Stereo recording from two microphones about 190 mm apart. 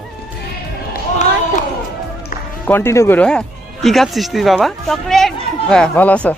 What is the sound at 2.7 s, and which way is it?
A man's voice, 10° left (ahead or behind).